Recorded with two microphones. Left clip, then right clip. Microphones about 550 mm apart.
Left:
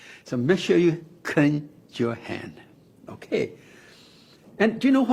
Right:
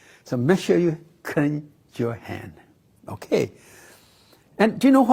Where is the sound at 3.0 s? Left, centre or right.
Right.